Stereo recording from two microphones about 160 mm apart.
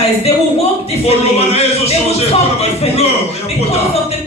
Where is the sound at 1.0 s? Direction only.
40° left (ahead or behind).